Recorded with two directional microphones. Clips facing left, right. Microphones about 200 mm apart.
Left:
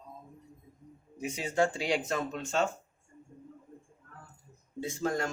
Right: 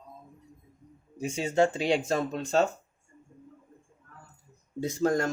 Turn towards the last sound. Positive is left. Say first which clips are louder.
# right 6 dB
turn(degrees=-40)  # may be behind; listen again after turning